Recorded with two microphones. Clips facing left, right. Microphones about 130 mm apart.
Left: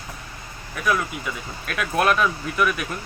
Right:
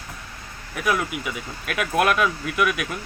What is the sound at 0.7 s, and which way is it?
Speech, 15° right (ahead or behind).